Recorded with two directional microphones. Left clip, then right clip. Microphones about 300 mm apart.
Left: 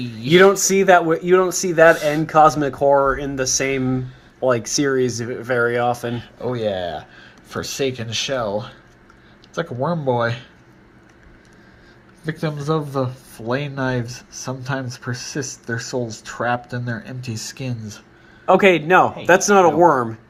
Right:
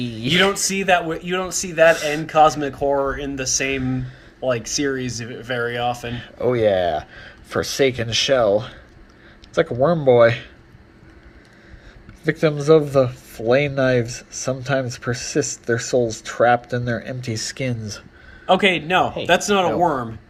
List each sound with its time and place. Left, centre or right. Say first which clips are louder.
0.0 s a sound: right 3 dB; centre
0.3 s a man's voice: left 5 dB; left
6.4 s speech: right 6 dB; centre
7.5 s speech: right 4 dB; right
7.8 s speech: right 4 dB; centre
9.9 s speech: right 8 dB; centre
12.2 s speech: right 7 dB; centre
14.4 s speech: right 5 dB; right
15.9 s speech: right 6 dB; centre
18.4 s speech: left 3 dB; centre